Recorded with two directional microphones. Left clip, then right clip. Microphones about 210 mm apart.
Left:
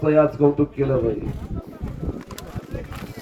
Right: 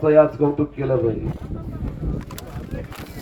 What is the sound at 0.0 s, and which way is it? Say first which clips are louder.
Speech: right 3 dB; 45° left (ahead or behind).